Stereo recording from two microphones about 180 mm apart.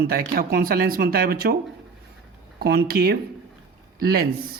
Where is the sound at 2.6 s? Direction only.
60° right (ahead or behind).